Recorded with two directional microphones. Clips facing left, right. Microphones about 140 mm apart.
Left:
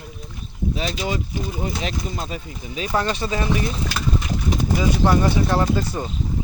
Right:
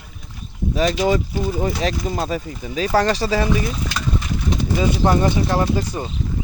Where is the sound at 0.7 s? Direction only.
45° right (ahead or behind).